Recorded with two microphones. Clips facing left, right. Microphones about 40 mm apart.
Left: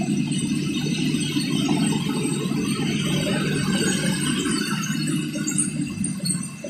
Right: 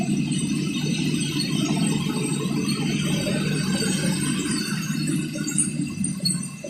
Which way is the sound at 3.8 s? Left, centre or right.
Left.